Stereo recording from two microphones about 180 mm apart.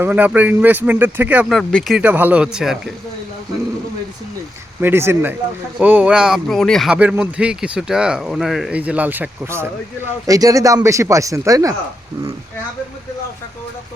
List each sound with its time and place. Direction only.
0.0 s speech: 10° right (ahead or behind)
4.8 s speech: 10° right (ahead or behind)